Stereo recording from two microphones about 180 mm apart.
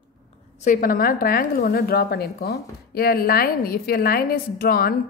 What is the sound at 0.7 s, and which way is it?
A woman's voice, 50° left (ahead or behind).